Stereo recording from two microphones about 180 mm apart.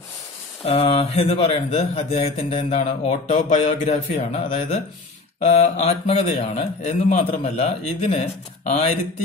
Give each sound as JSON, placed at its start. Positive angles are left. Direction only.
{"t": 0.7, "sound": "a man's voice", "side_deg": 35}